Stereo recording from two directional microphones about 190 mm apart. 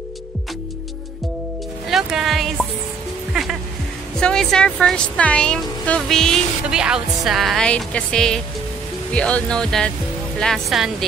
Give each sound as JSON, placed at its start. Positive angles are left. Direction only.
{"t": 1.9, "sound": "speech", "side_deg": 0}
{"t": 4.2, "sound": "speech", "side_deg": 5}